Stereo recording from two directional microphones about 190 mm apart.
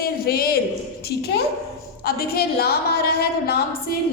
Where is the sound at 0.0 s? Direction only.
55° left (ahead or behind).